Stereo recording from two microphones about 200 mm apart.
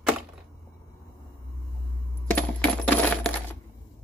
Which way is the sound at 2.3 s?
10° left (ahead or behind).